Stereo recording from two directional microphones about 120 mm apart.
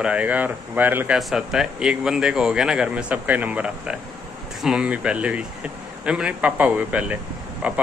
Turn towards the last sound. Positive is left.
turn(degrees=-10)  # may be behind; listen again after turning